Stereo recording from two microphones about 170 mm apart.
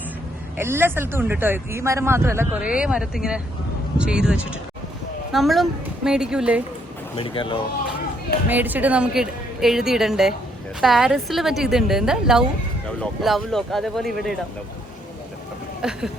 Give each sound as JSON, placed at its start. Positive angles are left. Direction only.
{"t": 0.6, "sound": "a woman's voice", "side_deg": -15}
{"t": 7.2, "sound": "speech", "side_deg": 30}
{"t": 8.4, "sound": "a woman's voice", "side_deg": -10}
{"t": 15.8, "sound": "speech", "side_deg": -5}